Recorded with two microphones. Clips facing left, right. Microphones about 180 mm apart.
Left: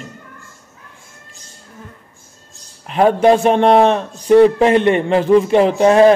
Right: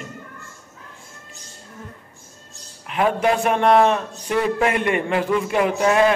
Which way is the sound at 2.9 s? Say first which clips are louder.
Left 8 dB; 35° left (ahead or behind).